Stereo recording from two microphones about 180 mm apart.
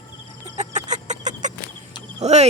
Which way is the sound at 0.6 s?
40° right (ahead or behind).